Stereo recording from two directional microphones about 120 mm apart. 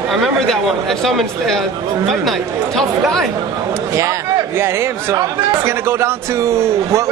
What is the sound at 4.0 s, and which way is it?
A man's voice, 25° right (ahead or behind).